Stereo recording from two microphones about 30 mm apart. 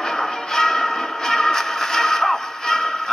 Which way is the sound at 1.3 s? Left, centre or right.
Centre.